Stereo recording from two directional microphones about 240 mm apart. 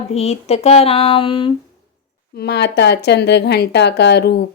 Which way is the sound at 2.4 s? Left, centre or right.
Left.